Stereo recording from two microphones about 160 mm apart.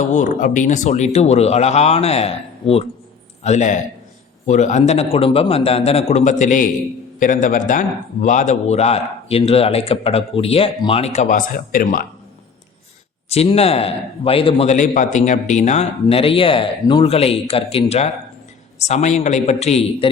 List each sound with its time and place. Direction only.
0.1 s a man's voice: 50° left (ahead or behind)
13.3 s speech: 40° left (ahead or behind)
14.8 s a man's voice: 50° left (ahead or behind)